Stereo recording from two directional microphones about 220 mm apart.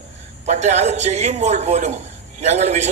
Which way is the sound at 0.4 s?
30° right (ahead or behind).